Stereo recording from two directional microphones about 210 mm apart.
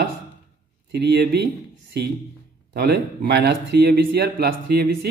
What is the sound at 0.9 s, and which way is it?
Speech, 50° right (ahead or behind).